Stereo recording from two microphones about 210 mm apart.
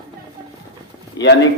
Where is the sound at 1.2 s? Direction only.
55° left (ahead or behind).